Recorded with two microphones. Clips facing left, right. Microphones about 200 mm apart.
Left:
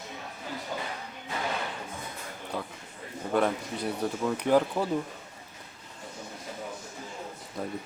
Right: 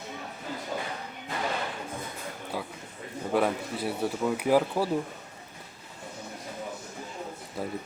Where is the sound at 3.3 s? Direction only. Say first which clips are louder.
Even; 5° right (ahead or behind).